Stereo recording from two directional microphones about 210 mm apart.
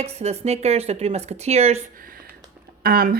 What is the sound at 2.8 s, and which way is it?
Speech, 45° right (ahead or behind).